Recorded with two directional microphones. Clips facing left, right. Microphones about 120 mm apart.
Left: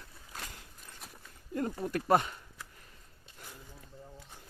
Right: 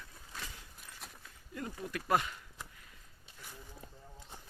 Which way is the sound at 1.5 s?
45° left (ahead or behind).